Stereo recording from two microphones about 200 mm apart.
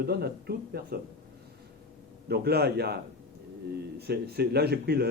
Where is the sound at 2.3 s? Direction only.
50° right (ahead or behind).